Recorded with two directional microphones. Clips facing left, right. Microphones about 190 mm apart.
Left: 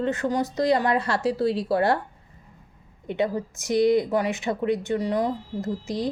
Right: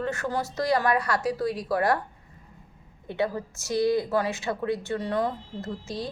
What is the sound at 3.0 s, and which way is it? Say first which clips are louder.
Speech: left 3 dB; 20° left (ahead or behind).